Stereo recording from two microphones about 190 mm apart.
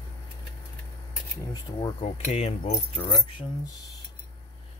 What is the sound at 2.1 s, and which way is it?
Speech, 30° left (ahead or behind).